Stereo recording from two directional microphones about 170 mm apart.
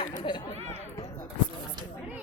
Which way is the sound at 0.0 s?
30° left (ahead or behind).